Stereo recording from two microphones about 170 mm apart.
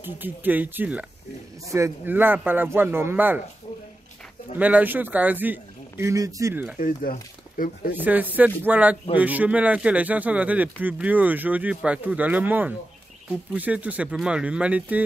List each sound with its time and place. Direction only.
0.0 s speech: 10° right (ahead or behind)
4.6 s speech: 10° right (ahead or behind)
6.8 s speech: 55° left (ahead or behind)
7.9 s speech: 10° right (ahead or behind)